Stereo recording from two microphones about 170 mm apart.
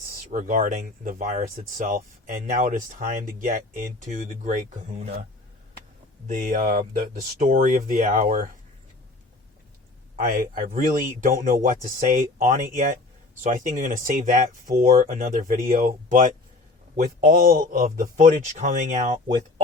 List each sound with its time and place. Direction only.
0.1 s speech: 50° right (ahead or behind)
6.2 s speech: 50° right (ahead or behind)
10.2 s speech: 55° right (ahead or behind)